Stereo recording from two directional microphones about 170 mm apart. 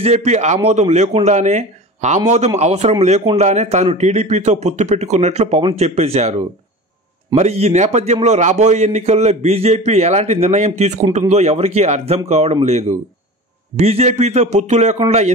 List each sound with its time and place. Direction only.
0.0 s a man's voice: 40° right (ahead or behind)